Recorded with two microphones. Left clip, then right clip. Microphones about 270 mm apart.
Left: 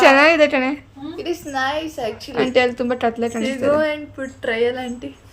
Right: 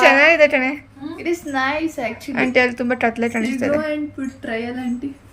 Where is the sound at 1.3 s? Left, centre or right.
Left.